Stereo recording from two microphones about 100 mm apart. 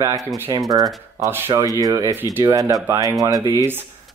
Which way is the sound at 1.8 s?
35° right (ahead or behind).